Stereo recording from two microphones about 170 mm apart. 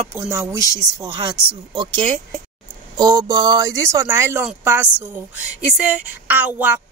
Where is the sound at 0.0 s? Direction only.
15° right (ahead or behind).